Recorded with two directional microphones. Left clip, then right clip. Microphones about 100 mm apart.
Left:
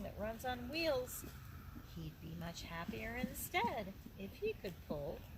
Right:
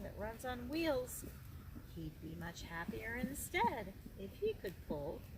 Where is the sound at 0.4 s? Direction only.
20° right (ahead or behind).